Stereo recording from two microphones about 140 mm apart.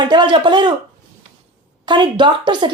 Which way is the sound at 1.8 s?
35° right (ahead or behind).